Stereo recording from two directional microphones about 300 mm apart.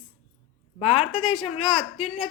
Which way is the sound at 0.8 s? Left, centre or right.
Centre.